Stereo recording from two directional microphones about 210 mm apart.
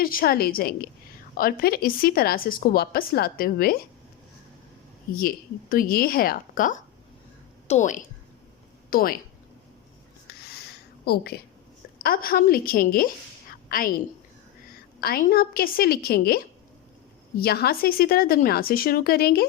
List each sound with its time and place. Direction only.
0.0 s speech: 45° left (ahead or behind)
5.1 s a woman's voice: 45° left (ahead or behind)
10.5 s a sound: 50° left (ahead or behind)
12.0 s a woman's voice: 45° left (ahead or behind)
15.0 s speech: 45° left (ahead or behind)